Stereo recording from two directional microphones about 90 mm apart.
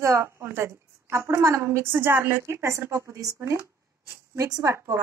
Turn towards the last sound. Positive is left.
turn(degrees=-40)  # may be behind; listen again after turning